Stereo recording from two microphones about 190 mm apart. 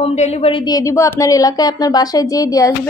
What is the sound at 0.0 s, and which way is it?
A woman's voice, 35° left (ahead or behind).